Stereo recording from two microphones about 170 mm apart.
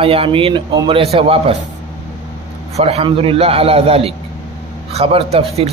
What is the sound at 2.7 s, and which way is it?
A man's voice, 35° right (ahead or behind).